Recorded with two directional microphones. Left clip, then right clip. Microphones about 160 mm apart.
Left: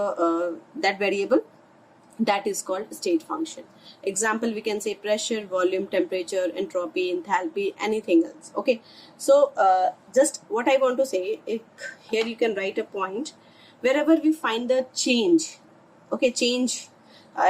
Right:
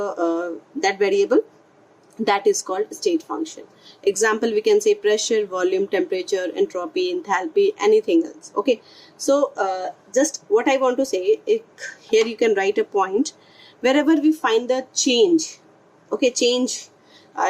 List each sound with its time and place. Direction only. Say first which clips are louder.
0.0 s a woman's voice: right 1 dB; 20° right (ahead or behind)
4.2 s speech: right 5 dB; 40° right (ahead or behind)
9.3 s a woman's voice: left 2 dB; 35° right (ahead or behind)